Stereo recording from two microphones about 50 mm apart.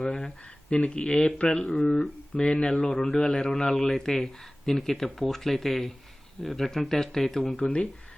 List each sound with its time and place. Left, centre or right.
0.0 s speech: centre
1.4 s a man's voice: left; by 7.6 s centre
7.6 s speech: left